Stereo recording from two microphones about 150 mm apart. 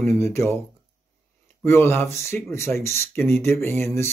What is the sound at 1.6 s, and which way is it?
Speech, 15° left (ahead or behind).